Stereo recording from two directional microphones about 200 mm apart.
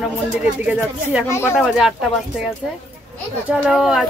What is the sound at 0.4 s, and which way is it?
Speech, 5° right (ahead or behind).